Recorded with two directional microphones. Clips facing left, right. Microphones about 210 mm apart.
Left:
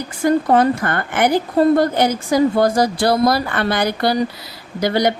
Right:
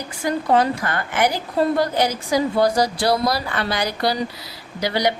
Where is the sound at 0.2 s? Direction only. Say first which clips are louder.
Left 5 dB; 50° left (ahead or behind).